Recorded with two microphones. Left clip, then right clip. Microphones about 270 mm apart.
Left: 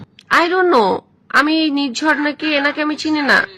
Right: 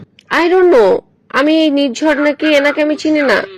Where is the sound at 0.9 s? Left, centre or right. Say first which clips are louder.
Right 1 dB; centre.